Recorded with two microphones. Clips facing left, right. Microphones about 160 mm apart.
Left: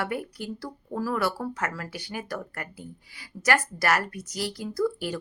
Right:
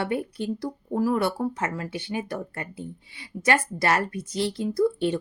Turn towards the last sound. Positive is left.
turn(degrees=-25)  # may be behind; listen again after turning